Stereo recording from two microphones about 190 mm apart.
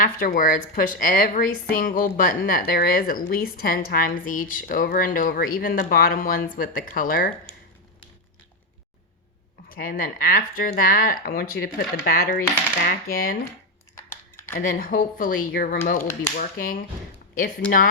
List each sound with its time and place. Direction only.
0.0 s a woman's voice: 50° left (ahead or behind)
9.6 s a woman's voice: 50° left (ahead or behind)
13.9 s a sound: 15° left (ahead or behind)
14.5 s a woman's voice: 45° left (ahead or behind)